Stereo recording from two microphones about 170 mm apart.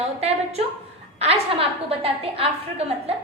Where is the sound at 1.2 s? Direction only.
35° right (ahead or behind).